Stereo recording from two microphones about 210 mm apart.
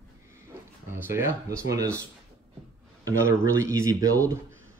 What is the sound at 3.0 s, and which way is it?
Speech, 15° right (ahead or behind).